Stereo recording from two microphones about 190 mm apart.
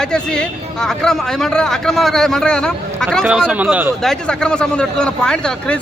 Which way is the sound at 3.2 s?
5° right (ahead or behind).